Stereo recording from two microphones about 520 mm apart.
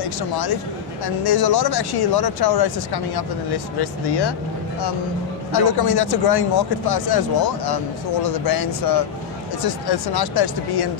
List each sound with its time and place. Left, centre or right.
0.0 s speech: left
5.5 s speech: left